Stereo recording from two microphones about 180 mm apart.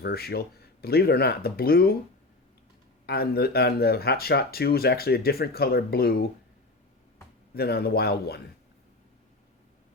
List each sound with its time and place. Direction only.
0.0 s speech: 60° left (ahead or behind)
3.1 s speech: 60° left (ahead or behind)
7.5 s speech: 60° left (ahead or behind)